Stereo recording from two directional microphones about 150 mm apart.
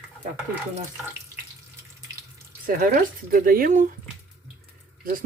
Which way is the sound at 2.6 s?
75° right (ahead or behind).